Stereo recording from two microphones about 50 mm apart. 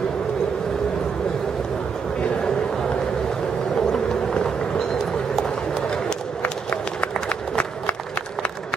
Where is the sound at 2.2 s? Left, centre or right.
Centre.